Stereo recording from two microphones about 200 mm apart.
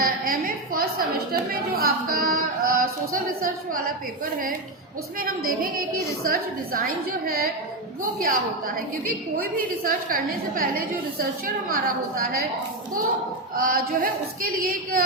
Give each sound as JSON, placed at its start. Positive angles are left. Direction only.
{"t": 0.0, "sound": "a woman's voice", "side_deg": -45}
{"t": 5.5, "sound": "a woman's voice", "side_deg": -45}
{"t": 13.6, "sound": "a woman's voice", "side_deg": -45}